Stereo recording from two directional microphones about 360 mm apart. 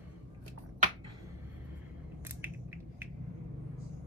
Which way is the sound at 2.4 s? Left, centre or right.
Centre.